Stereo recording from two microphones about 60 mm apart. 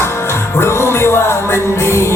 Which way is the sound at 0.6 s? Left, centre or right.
Left.